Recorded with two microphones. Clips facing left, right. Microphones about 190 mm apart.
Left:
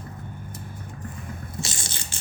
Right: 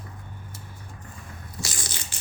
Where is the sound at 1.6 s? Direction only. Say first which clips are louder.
Left 1 dB; 25° left (ahead or behind).